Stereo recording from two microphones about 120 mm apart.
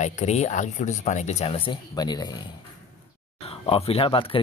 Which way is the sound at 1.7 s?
35° left (ahead or behind).